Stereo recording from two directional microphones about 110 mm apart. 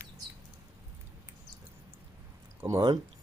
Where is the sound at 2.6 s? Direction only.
30° right (ahead or behind).